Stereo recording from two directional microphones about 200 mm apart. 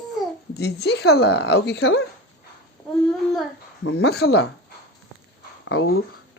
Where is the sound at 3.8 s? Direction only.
55° left (ahead or behind).